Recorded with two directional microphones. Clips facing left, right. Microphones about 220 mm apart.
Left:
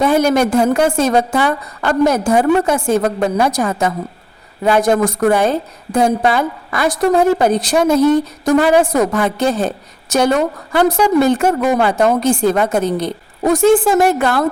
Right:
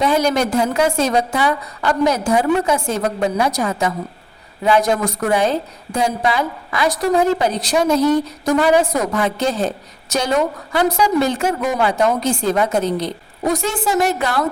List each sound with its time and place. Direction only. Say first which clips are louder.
0.0 s a woman's voice: left 4 dB; 50° left (ahead or behind)